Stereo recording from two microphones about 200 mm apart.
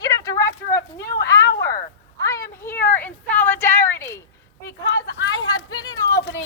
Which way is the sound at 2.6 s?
10° left (ahead or behind).